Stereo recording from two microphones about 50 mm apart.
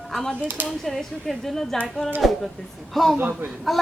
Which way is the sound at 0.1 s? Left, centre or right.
Centre.